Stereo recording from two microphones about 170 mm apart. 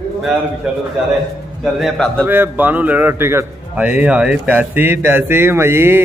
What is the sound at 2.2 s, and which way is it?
A man's voice, 10° right (ahead or behind).